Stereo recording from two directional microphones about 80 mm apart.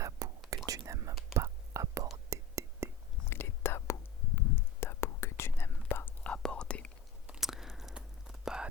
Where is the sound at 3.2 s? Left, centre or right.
Left.